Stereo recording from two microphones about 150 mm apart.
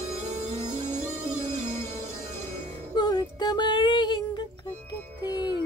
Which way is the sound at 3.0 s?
30° left (ahead or behind).